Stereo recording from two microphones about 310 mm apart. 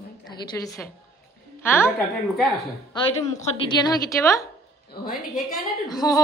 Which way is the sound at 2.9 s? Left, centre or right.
Centre.